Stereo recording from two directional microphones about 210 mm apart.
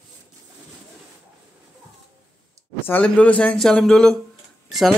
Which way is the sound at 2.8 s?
5° left (ahead or behind).